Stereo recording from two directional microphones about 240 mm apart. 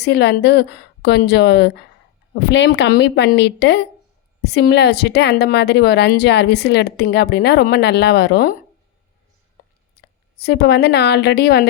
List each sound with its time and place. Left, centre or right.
0.0 s a woman's voice: left
9.6 s a sound: left
9.9 s a woman's voice: left